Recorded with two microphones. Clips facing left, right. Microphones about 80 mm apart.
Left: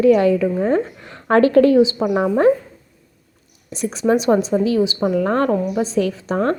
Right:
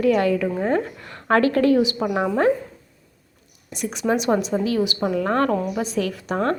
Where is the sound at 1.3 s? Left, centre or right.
Left.